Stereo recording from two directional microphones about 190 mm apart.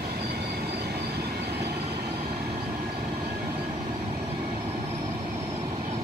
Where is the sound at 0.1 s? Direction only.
60° right (ahead or behind).